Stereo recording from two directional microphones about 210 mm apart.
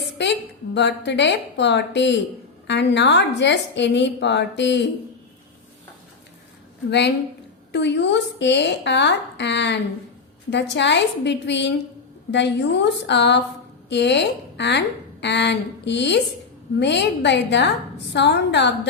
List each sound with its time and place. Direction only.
0.2 s a woman's voice: 55° left (ahead or behind)
7.7 s a woman's voice: 55° left (ahead or behind)